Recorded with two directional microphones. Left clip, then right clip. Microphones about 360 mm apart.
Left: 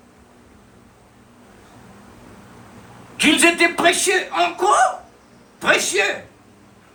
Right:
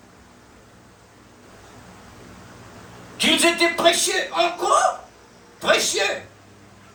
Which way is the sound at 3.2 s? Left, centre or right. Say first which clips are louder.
Left 3 dB; left.